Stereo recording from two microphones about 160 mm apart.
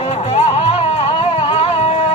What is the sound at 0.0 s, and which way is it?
Music, 40° left (ahead or behind).